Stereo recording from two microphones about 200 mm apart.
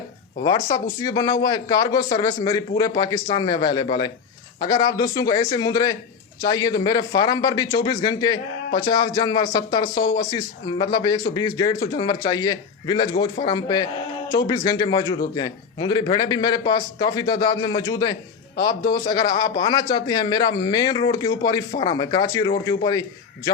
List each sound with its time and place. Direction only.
0.4 s speech: 15° left (ahead or behind)